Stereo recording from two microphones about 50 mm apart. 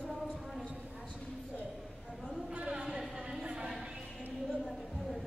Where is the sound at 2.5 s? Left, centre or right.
Right.